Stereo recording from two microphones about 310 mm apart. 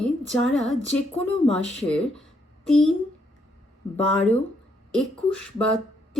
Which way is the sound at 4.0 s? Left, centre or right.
Centre.